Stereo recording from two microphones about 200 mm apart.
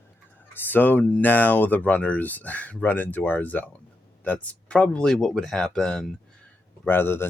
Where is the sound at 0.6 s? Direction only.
10° left (ahead or behind).